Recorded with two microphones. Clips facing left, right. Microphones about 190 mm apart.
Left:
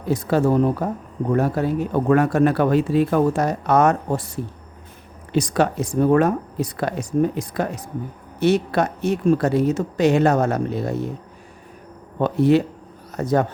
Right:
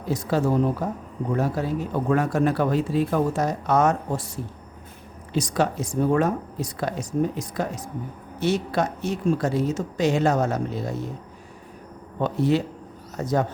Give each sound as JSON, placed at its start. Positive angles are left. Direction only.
{"t": 0.1, "sound": "speech", "side_deg": 60}
{"t": 5.3, "sound": "speech", "side_deg": 65}
{"t": 12.2, "sound": "speech", "side_deg": 60}